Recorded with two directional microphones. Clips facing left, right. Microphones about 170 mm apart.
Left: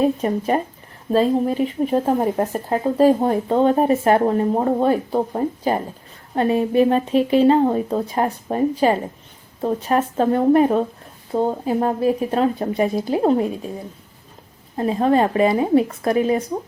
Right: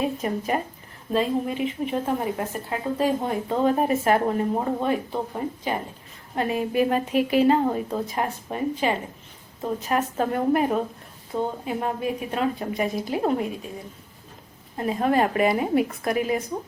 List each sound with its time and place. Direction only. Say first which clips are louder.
0.0 s speech: left 7 dB; 35° left (ahead or behind)
14.8 s a woman's voice: left 5 dB; 30° left (ahead or behind)